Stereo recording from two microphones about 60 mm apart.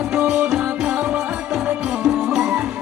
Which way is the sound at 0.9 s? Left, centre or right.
Right.